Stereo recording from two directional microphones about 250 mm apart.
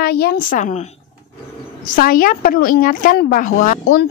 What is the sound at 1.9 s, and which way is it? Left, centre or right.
A woman's voice, left.